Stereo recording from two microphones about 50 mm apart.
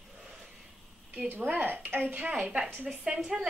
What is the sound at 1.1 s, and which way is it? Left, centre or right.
A woman's voice, right.